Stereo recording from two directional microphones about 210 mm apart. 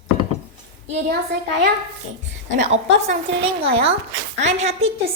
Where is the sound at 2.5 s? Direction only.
30° right (ahead or behind).